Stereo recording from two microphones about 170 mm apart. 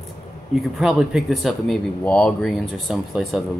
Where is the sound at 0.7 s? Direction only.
Centre (ahead or behind).